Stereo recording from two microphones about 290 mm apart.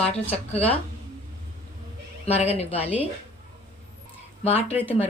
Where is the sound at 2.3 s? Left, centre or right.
Left.